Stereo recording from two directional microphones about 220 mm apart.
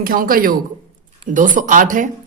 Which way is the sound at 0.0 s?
40° right (ahead or behind).